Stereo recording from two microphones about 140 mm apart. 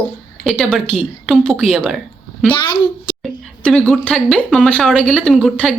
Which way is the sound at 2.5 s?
40° left (ahead or behind).